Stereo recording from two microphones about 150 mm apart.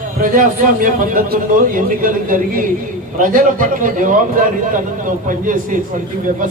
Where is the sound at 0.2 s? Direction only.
70° right (ahead or behind).